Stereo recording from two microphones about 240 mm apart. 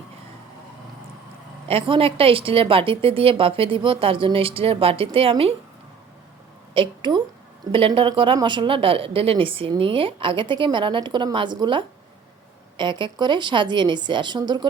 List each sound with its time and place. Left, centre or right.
1.6 s speech: right
6.7 s a woman's voice: centre